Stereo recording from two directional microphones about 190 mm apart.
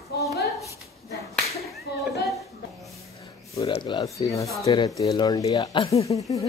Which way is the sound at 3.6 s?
30° left (ahead or behind).